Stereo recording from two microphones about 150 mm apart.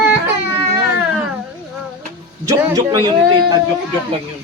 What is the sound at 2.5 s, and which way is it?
Speech, 25° right (ahead or behind).